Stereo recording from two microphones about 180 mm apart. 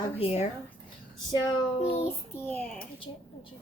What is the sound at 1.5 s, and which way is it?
Speech, 35° left (ahead or behind).